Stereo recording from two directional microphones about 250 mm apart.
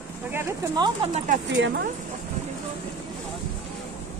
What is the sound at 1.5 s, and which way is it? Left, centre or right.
Speech, right.